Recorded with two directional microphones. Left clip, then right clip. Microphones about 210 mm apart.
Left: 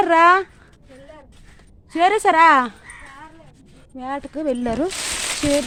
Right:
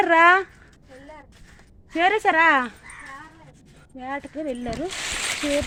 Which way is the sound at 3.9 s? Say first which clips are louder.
Left 4 dB; 25° left (ahead or behind).